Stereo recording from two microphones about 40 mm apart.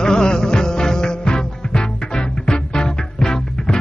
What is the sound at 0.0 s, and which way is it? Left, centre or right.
Music, centre.